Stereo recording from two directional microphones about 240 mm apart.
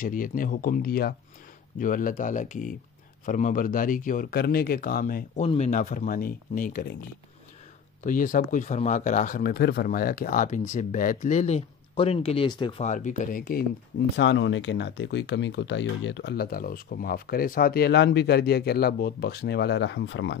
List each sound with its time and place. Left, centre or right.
0.0 s speech: left
8.0 s speech: left